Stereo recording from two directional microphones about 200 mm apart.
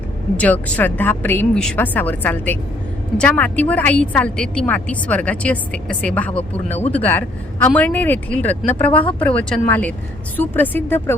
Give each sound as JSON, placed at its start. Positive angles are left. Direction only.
{"t": 0.3, "sound": "a woman's voice", "side_deg": 10}
{"t": 9.0, "sound": "speech", "side_deg": 25}
{"t": 9.2, "sound": "a woman's voice", "side_deg": 5}